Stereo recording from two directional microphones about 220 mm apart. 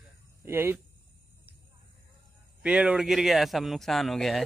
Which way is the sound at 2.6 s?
5° right (ahead or behind).